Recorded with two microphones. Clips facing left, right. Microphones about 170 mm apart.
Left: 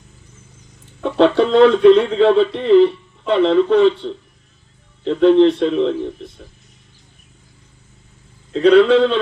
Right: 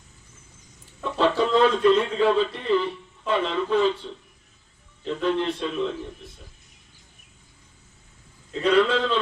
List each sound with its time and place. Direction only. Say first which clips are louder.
1.0 s speech: left 8 dB; 65° left (ahead or behind)
8.5 s speech: left 10 dB; 65° left (ahead or behind)